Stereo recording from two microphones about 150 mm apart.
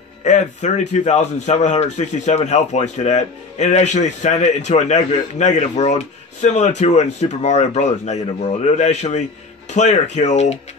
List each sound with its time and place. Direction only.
0.2 s speech: 50° left (ahead or behind)